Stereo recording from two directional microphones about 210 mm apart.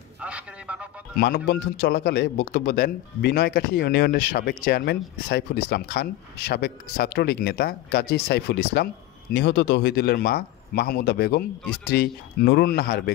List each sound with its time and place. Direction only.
0.2 s a man's voice: 5° right (ahead or behind)
1.1 s a man's voice: 50° left (ahead or behind)